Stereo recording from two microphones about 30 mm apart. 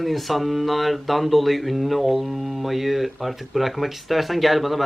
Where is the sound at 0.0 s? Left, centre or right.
Centre.